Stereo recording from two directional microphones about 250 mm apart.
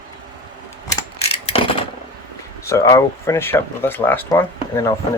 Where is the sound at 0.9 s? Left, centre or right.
Left.